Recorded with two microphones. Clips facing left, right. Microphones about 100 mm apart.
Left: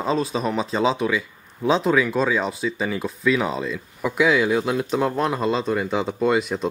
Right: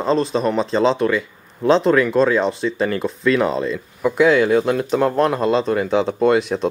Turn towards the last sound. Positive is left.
turn(degrees=0)  # may be behind; listen again after turning